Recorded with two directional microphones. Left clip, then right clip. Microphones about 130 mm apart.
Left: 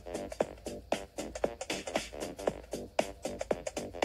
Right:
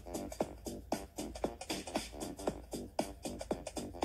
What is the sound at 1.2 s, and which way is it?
Music, 35° left (ahead or behind).